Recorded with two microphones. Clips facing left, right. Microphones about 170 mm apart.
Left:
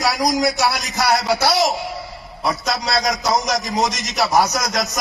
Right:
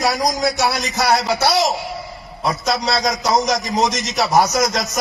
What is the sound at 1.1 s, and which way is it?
A man's voice, 25° right (ahead or behind).